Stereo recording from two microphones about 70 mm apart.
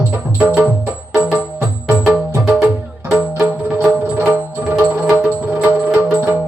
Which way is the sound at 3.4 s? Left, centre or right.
Centre.